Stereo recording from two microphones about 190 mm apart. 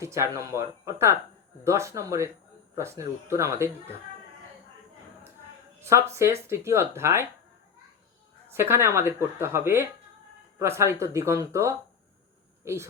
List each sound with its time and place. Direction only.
0.0 s speech: 15° right (ahead or behind)
5.8 s speech: 15° right (ahead or behind)
8.4 s speech: 10° right (ahead or behind)